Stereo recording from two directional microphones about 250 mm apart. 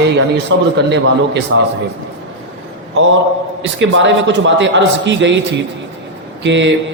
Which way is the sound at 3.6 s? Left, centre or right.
Right.